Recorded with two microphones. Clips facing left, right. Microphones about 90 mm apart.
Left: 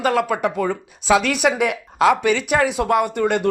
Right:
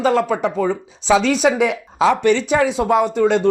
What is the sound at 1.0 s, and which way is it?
Speech, 5° left (ahead or behind).